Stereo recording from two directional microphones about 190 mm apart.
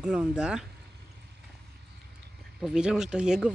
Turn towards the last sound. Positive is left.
turn(degrees=-5)  # may be behind; listen again after turning